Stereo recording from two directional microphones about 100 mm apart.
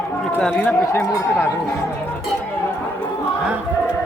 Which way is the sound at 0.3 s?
10° left (ahead or behind).